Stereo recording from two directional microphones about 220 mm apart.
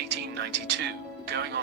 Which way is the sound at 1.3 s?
45° right (ahead or behind).